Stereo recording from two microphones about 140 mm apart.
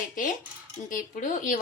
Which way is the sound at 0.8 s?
75° left (ahead or behind).